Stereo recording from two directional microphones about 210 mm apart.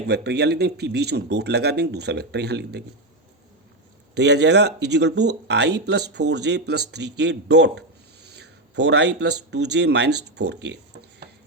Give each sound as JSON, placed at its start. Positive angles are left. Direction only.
{"t": 0.1, "sound": "speech", "side_deg": -50}
{"t": 4.1, "sound": "speech", "side_deg": -55}